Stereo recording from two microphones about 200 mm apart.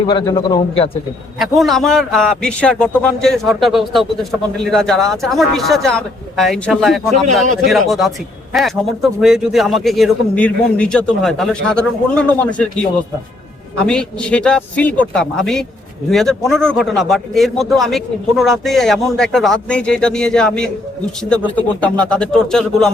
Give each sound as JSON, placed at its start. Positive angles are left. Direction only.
{"t": 0.1, "sound": "a man's voice", "side_deg": 25}
{"t": 1.4, "sound": "a man's voice", "side_deg": 0}
{"t": 13.8, "sound": "a man's voice", "side_deg": 5}